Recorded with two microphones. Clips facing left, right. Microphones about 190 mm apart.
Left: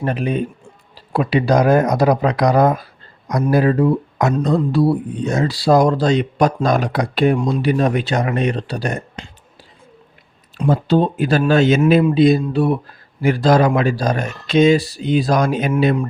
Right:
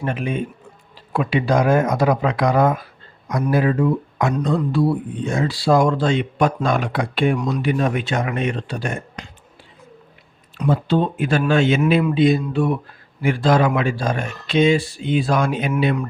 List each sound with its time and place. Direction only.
0.0 s speech: 35° left (ahead or behind)
10.7 s speech: 40° left (ahead or behind)